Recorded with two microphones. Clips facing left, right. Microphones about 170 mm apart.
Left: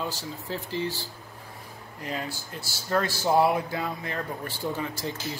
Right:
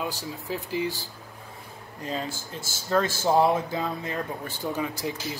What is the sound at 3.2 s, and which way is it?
A man's voice, 20° right (ahead or behind).